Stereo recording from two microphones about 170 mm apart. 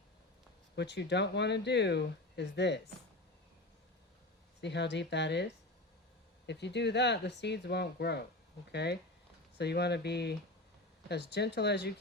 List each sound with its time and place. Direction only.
0.8 s speech: 90° left
4.6 s speech: 90° left